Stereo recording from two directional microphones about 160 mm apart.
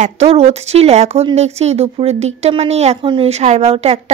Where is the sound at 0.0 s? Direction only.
40° right (ahead or behind).